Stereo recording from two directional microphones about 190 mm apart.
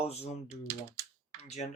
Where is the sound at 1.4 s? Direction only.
35° left (ahead or behind).